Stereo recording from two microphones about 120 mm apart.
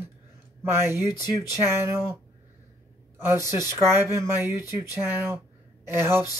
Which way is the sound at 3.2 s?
20° right (ahead or behind).